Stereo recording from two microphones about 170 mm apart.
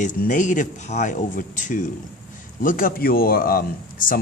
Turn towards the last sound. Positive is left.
turn(degrees=55)  # may be behind; listen again after turning